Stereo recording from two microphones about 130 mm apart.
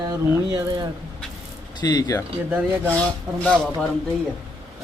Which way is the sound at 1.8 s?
30° left (ahead or behind).